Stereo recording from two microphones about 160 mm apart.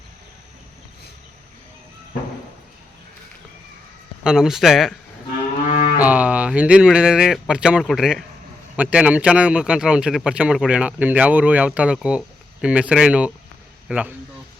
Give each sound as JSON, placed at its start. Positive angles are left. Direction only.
{"t": 4.2, "sound": "speech", "side_deg": -5}
{"t": 5.6, "sound": "a sound", "side_deg": 60}
{"t": 6.0, "sound": "a man's voice", "side_deg": -10}